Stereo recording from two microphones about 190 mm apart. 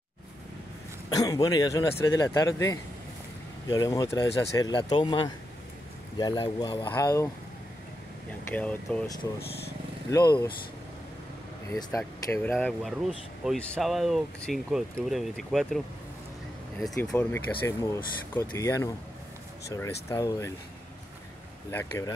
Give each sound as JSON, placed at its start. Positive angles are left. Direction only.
{"t": 1.1, "sound": "speech", "side_deg": 20}
{"t": 8.5, "sound": "speech", "side_deg": 5}
{"t": 10.1, "sound": "speech", "side_deg": 20}
{"t": 11.9, "sound": "speech", "side_deg": 15}
{"t": 12.5, "sound": "speech", "side_deg": 0}
{"t": 16.8, "sound": "speech", "side_deg": 5}
{"t": 21.6, "sound": "speech", "side_deg": 15}